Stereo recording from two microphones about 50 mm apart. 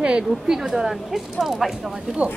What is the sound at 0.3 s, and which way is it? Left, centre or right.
Speech, centre.